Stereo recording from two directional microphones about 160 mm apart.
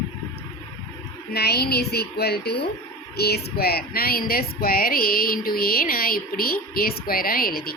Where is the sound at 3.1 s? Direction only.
85° left; by 7.7 s 70° left (ahead or behind).